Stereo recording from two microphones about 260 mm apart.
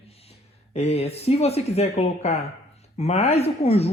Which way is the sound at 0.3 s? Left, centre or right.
Left.